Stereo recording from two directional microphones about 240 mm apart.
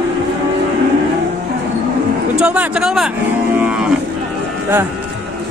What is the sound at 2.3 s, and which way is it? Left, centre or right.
Speech, centre.